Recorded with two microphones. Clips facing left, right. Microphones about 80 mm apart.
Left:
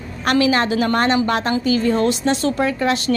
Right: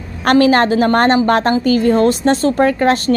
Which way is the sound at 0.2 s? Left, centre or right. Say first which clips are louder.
Right 6 dB; right.